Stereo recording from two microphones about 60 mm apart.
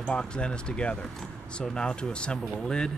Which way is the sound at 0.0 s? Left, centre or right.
Centre.